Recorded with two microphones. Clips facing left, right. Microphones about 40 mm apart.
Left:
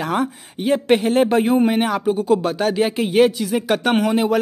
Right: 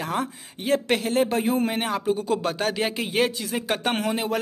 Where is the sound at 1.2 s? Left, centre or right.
Left.